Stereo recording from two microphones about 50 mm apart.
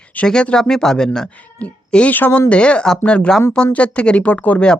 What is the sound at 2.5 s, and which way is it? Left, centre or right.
Speech, left.